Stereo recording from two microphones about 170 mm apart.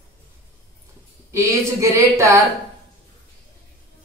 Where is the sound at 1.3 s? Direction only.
20° right (ahead or behind).